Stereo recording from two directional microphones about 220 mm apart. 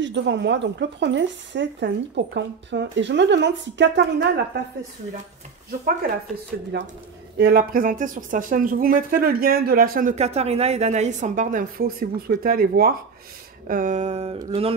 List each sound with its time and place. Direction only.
0.0 s speech: 55° right (ahead or behind)
6.7 s speech: 50° right (ahead or behind); by 14.4 s 25° right (ahead or behind)
14.5 s a sound: 25° right (ahead or behind)